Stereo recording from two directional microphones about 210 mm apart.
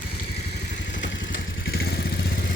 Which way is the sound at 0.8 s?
60° left (ahead or behind).